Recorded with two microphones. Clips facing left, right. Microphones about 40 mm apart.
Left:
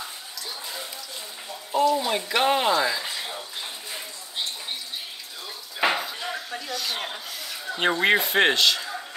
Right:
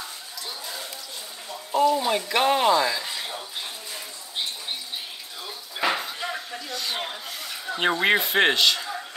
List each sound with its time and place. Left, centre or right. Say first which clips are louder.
1.7 s speech: right 1 dB; centre
5.8 s a sound: left 1 dB; left
6.7 s speech: even; centre